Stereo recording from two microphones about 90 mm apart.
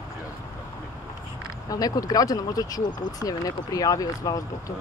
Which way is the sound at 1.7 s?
40° left (ahead or behind).